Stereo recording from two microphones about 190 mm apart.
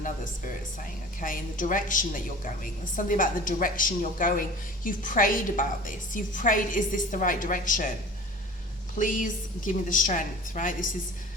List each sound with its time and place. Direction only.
0.0 s a woman's voice: 45° left (ahead or behind)
9.0 s a woman's voice: 45° left (ahead or behind)